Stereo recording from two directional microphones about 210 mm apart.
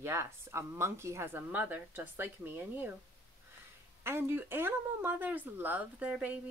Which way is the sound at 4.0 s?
10° right (ahead or behind).